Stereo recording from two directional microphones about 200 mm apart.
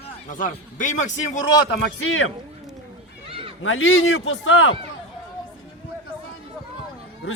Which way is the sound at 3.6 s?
80° left.